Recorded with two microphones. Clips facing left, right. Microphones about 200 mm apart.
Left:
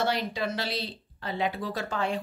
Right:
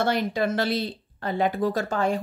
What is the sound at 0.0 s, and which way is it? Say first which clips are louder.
Speech: right 5 dB; 50° right (ahead or behind).